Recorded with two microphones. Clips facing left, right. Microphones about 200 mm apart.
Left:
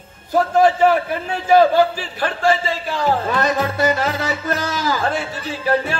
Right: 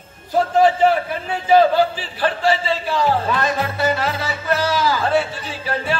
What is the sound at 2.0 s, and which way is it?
Speech, 45° left (ahead or behind).